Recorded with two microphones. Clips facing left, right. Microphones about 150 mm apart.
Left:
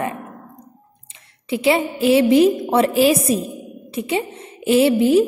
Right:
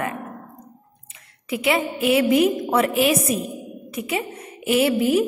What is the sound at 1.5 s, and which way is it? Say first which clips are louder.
A woman's voice: left 4 dB; 30° left (ahead or behind).